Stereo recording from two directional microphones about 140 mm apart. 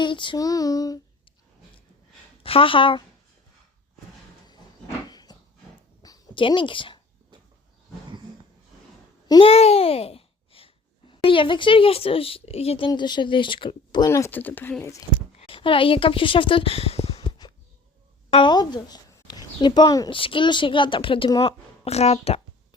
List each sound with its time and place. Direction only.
0.0 s female singing: 35° left (ahead or behind)
2.4 s speech: 40° left (ahead or behind)
5.0 s a sound: 30° left (ahead or behind)
9.2 s a child's voice: 30° left (ahead or behind)
9.5 s a child's voice: 45° left (ahead or behind)
12.9 s speech: 30° left (ahead or behind)
14.1 s speech: 15° left (ahead or behind)
15.4 s speech: 40° left (ahead or behind)
21.4 s speech: 50° left (ahead or behind)